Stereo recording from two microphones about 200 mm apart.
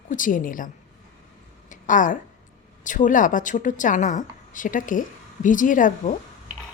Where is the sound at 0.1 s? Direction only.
40° left (ahead or behind).